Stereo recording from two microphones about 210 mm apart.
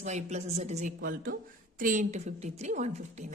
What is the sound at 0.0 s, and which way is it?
A woman's voice, 35° right (ahead or behind).